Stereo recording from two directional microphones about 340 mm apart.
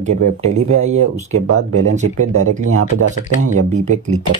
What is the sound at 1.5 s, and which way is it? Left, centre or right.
Speech, right.